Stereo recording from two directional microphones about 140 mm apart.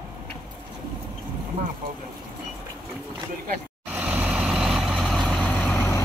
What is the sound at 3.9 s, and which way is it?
Vehicle, 10° right (ahead or behind).